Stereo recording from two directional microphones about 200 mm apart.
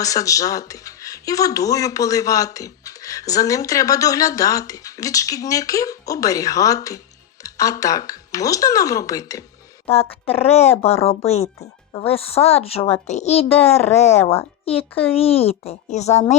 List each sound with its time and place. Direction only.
0.0 s speech: 15° left (ahead or behind)
9.9 s a child's voice: 30° left (ahead or behind)